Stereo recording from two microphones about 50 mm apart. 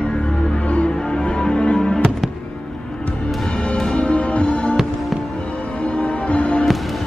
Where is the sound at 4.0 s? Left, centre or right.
Left.